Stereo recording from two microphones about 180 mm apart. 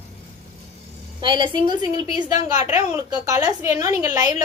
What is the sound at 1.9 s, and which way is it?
Speech, 40° left (ahead or behind).